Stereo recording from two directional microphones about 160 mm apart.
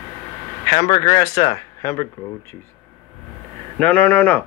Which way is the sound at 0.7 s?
25° left (ahead or behind).